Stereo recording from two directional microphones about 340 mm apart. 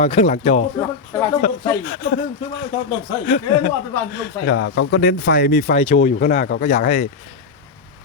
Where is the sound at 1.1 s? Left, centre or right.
Centre.